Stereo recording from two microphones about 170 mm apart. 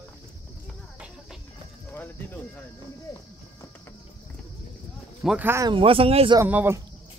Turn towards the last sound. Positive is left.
turn(degrees=-10)  # may be behind; listen again after turning